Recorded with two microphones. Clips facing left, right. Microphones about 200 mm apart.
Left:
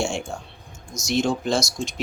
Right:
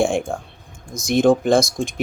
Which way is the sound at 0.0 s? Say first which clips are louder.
Right 7 dB; 55° right (ahead or behind).